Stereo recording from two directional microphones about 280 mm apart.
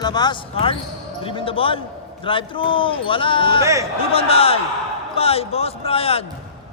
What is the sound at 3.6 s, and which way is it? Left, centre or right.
Speech, centre.